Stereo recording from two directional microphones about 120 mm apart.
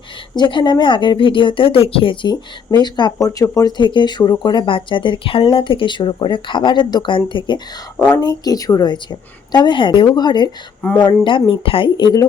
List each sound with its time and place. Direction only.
0.3 s speech: 40° left (ahead or behind)
3.8 s speech: 40° left (ahead or behind)